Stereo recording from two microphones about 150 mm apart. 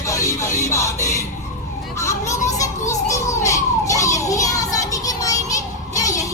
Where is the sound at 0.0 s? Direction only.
20° left (ahead or behind).